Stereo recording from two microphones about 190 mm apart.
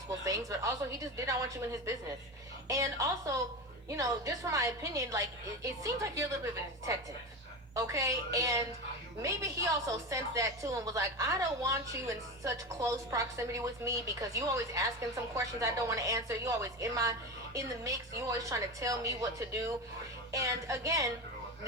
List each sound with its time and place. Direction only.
0.3 s a woman's voice: 15° right (ahead or behind)
7.9 s a woman's voice: 15° right (ahead or behind)